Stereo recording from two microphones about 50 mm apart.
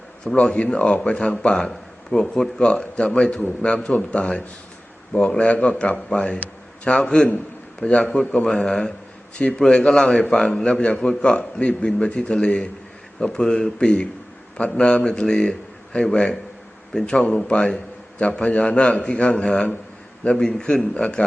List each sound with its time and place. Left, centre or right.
0.5 s a man's voice: left